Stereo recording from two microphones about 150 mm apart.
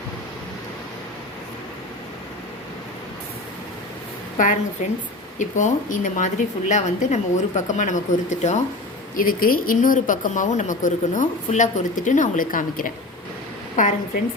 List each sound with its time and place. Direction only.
4.4 s speech: 60° left (ahead or behind)
9.1 s speech: 70° left (ahead or behind)